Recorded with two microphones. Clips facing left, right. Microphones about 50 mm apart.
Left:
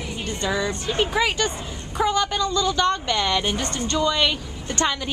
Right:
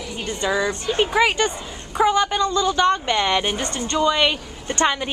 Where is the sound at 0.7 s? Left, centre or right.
Right.